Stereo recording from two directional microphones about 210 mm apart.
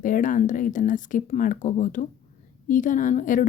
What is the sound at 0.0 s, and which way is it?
Speech, 40° left (ahead or behind).